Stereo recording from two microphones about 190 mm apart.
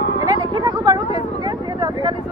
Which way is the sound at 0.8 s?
20° right (ahead or behind).